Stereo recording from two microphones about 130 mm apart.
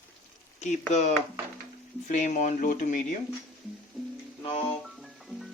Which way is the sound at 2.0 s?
80° left.